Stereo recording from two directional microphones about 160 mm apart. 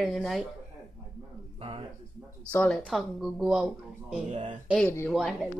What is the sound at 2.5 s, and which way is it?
Speech, 5° left (ahead or behind).